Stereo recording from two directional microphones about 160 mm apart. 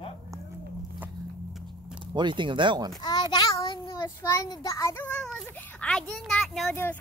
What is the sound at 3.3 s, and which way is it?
A child's voice, 25° left (ahead or behind).